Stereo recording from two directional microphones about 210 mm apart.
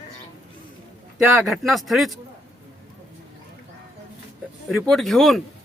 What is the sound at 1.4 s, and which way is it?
Speech, centre (ahead or behind).